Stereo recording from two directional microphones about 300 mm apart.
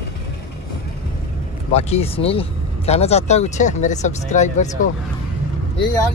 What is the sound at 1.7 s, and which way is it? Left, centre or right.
Speech, left.